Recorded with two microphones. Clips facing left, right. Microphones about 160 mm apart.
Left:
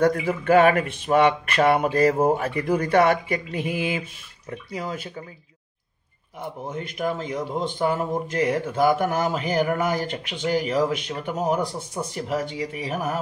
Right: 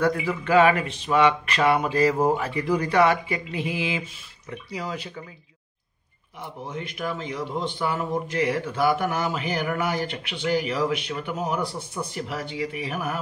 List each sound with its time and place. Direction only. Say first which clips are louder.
0.0 s speech: left 3 dB; 50° left (ahead or behind)
6.7 s speech: left 3 dB; 45° left (ahead or behind)